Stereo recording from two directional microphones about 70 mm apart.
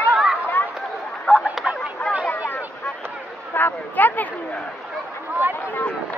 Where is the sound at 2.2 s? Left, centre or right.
Left.